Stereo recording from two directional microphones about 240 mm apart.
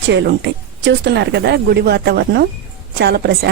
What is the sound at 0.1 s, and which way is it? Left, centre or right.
A woman's voice, right.